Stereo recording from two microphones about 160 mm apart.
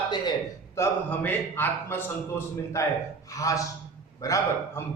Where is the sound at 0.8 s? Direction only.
10° left (ahead or behind).